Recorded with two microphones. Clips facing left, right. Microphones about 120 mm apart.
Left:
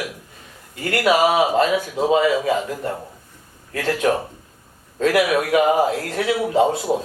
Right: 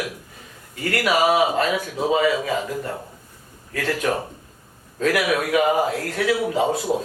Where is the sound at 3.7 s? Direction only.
25° left (ahead or behind).